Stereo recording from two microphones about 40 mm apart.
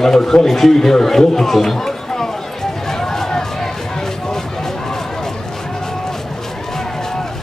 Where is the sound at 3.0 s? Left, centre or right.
Centre.